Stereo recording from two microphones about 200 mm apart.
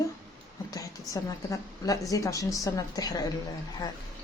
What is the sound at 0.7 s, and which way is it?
A woman's voice, 15° left (ahead or behind).